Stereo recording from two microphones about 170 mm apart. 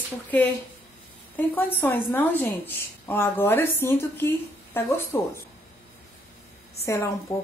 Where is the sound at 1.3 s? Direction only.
10° left (ahead or behind).